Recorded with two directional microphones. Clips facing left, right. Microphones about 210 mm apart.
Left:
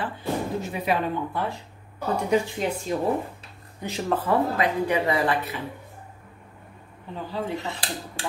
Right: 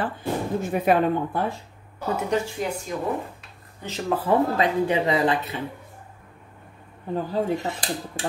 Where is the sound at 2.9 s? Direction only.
30° left (ahead or behind).